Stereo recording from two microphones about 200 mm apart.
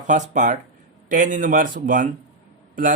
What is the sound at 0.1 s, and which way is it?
Speech, 40° right (ahead or behind).